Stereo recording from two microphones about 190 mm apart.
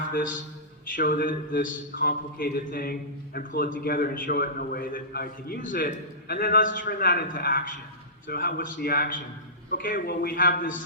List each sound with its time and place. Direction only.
0.1 s a man's voice: 45° left (ahead or behind)